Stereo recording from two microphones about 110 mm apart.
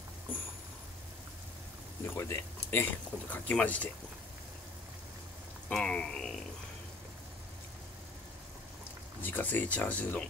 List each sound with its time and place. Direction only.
2.0 s speech: 25° left (ahead or behind)
5.7 s speech: 10° left (ahead or behind)
9.2 s speech: 15° left (ahead or behind)